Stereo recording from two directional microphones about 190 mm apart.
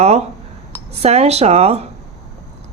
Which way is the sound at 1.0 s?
35° right (ahead or behind).